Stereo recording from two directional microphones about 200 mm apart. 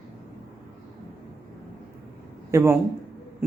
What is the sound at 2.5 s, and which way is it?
Speech, 15° right (ahead or behind).